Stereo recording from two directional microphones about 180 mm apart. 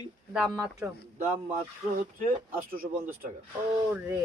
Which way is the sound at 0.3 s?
5° right (ahead or behind).